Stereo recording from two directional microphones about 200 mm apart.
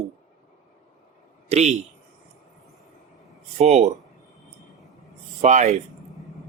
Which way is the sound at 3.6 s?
30° right (ahead or behind).